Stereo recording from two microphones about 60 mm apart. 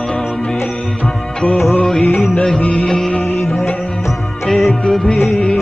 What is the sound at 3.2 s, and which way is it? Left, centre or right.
Music, left.